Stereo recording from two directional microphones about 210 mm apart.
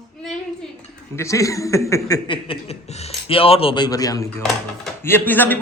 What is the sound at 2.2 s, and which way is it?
A man's voice, 25° left (ahead or behind).